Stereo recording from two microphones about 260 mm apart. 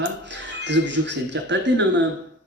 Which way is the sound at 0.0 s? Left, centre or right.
Right.